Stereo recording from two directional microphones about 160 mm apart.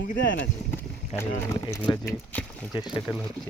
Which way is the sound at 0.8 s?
15° left (ahead or behind).